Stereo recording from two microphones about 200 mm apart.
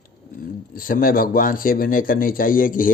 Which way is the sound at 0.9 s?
45° left (ahead or behind).